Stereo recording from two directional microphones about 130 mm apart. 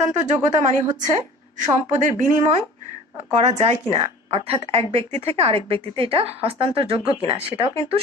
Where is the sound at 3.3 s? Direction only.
55° right (ahead or behind).